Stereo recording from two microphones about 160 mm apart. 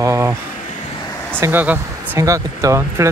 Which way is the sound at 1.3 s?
15° right (ahead or behind).